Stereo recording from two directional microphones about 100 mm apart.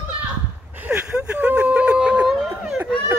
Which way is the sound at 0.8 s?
15° right (ahead or behind).